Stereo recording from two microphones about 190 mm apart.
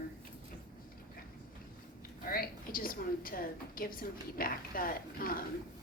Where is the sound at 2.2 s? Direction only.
50° left (ahead or behind).